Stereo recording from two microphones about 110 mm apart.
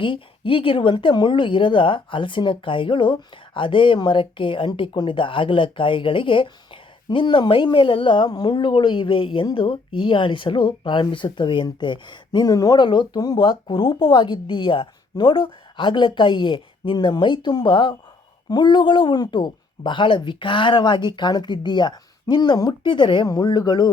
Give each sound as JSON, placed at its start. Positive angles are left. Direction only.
{"t": 0.0, "sound": "speech", "side_deg": 50}
{"t": 13.4, "sound": "speech", "side_deg": 45}